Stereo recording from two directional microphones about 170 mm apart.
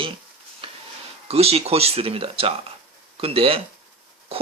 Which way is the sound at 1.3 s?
35° right (ahead or behind).